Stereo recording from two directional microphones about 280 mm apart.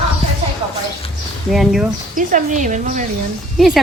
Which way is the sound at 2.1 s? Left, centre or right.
Right.